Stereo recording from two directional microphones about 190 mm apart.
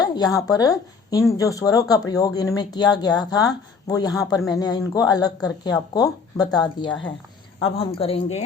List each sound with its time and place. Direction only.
0.0 s speech: 20° left (ahead or behind)